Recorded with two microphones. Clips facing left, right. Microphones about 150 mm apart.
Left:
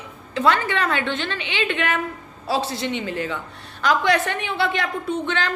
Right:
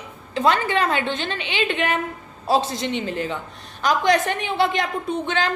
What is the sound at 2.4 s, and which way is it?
A woman's voice, 20° right (ahead or behind).